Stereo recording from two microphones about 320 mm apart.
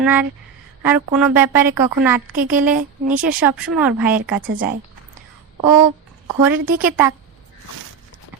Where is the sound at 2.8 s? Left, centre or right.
Right.